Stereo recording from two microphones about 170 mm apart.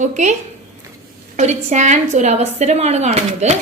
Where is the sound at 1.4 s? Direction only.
45° right (ahead or behind).